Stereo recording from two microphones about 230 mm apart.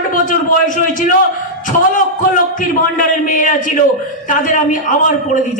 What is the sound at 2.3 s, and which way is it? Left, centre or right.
A man's voice, left.